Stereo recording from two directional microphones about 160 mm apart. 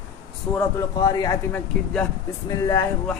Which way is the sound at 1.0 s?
25° left (ahead or behind).